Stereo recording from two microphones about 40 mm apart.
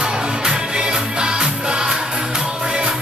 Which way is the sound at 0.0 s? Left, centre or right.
Centre.